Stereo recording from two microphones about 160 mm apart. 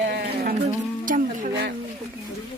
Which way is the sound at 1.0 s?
55° right (ahead or behind).